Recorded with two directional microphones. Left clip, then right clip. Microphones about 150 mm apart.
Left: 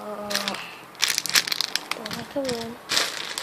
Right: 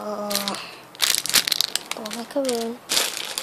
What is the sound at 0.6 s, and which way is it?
Crumpling, 25° right (ahead or behind).